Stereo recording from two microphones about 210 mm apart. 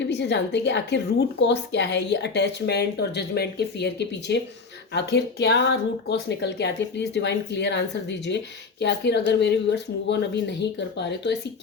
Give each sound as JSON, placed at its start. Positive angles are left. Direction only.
{"t": 0.1, "sound": "speech", "side_deg": 55}